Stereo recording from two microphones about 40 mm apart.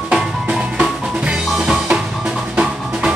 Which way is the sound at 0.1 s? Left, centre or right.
Right.